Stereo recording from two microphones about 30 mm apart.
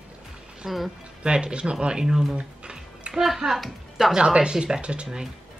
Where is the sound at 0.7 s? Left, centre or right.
Centre.